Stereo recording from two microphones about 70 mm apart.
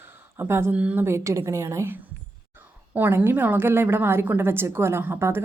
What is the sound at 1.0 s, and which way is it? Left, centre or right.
Speech, right.